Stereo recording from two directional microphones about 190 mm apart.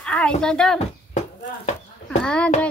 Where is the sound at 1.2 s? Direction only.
40° left (ahead or behind).